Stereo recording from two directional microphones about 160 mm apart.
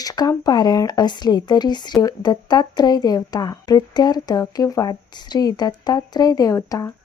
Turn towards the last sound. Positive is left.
turn(degrees=20)  # may be behind; listen again after turning